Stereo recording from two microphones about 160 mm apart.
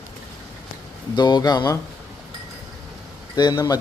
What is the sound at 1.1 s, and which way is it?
Speech, 25° left (ahead or behind).